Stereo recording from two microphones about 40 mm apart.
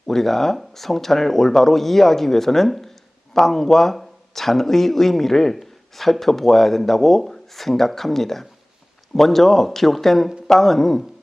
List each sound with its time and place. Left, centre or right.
0.1 s a man's voice: centre